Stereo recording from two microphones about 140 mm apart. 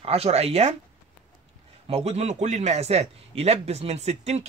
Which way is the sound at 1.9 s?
45° right (ahead or behind).